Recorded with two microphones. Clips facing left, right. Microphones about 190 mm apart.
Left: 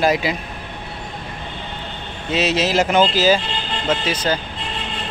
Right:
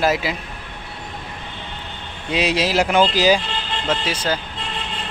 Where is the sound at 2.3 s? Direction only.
10° right (ahead or behind).